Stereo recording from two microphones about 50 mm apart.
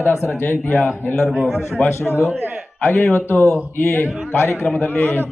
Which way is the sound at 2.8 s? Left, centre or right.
Left.